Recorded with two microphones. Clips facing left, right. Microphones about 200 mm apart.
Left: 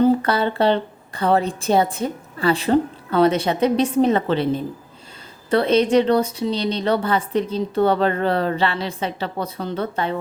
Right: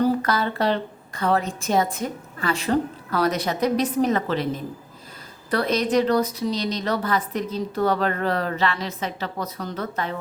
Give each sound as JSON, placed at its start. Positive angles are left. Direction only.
{"t": 0.0, "sound": "a woman's voice", "side_deg": 30}